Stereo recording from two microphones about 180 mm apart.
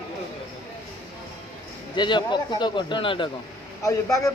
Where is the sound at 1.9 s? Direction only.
25° left (ahead or behind).